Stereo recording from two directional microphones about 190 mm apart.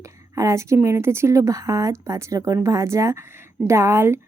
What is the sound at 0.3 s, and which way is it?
Speech, 15° right (ahead or behind).